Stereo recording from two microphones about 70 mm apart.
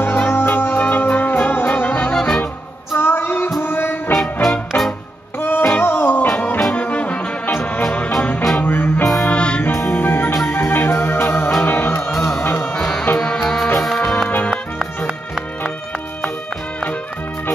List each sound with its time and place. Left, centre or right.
0.0 s music: left
2.1 s music: centre
2.9 s music: left
4.2 s music: centre
5.4 s music: left
9.2 s music: centre
9.7 s music: left
13.2 s music: centre